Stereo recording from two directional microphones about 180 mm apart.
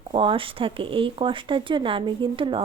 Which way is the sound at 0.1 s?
30° right (ahead or behind).